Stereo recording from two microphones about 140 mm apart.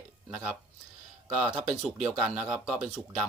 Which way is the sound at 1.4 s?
5° right (ahead or behind).